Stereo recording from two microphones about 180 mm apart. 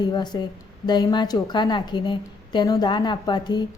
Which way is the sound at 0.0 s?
25° left (ahead or behind).